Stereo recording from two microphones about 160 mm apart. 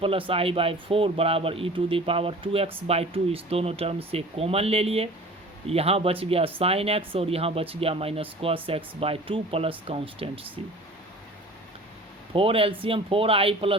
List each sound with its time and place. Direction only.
0.0 s speech: 35° right (ahead or behind)
12.3 s speech: 35° right (ahead or behind)